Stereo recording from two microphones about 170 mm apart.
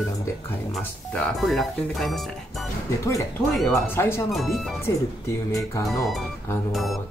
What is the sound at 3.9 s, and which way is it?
Speech, 15° left (ahead or behind).